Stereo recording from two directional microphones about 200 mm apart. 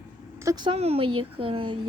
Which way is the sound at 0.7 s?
30° right (ahead or behind).